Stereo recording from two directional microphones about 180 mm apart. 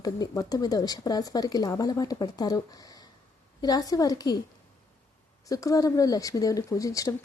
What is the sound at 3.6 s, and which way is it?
Speech, 20° left (ahead or behind).